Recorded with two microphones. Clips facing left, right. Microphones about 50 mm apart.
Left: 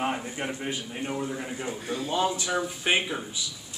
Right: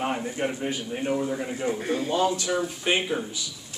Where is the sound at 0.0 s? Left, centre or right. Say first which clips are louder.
Right 1 dB; centre.